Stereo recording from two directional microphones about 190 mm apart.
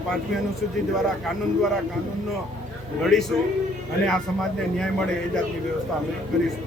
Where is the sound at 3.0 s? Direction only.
Centre (ahead or behind).